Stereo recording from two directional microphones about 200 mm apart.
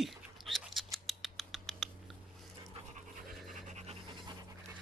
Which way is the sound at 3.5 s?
35° right (ahead or behind).